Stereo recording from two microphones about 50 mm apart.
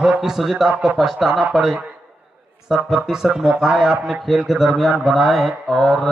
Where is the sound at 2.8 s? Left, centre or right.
Centre.